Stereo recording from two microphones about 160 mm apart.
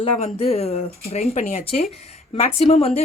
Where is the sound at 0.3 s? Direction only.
40° left (ahead or behind).